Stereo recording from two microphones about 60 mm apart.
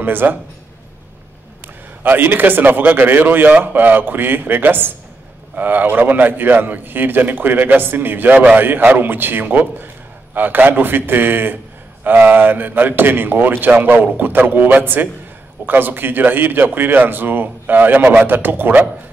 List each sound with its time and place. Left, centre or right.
0.0 s a man's voice: right
2.0 s a man's voice: right